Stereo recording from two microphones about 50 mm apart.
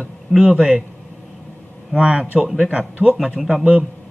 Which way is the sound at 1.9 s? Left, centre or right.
Centre.